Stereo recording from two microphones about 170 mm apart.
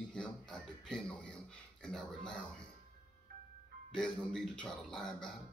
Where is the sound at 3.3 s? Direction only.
60° right (ahead or behind).